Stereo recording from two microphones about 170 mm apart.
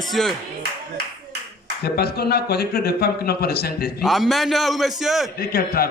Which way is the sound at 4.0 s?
Centre (ahead or behind).